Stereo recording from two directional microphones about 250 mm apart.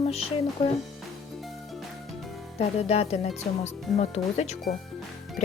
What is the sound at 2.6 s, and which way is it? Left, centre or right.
Speech, left.